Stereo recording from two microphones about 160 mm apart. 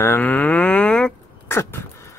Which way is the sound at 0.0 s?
15° left (ahead or behind).